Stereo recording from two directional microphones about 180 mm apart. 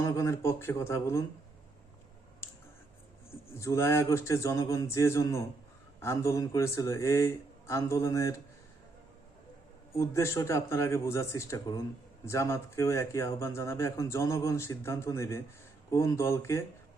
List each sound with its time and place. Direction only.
0.0 s speech: 15° left (ahead or behind)
3.5 s speech: 15° left (ahead or behind)
10.0 s speech: 15° left (ahead or behind)